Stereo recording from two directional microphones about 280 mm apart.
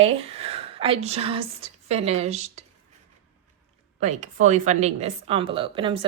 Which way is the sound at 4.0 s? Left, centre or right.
Right.